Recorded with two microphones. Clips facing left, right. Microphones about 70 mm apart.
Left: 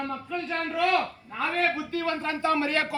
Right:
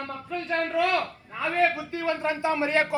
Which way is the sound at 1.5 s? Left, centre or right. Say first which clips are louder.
Right 3 dB; centre.